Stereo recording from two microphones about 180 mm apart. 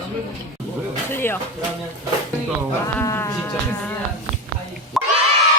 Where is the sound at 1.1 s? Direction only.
10° left (ahead or behind).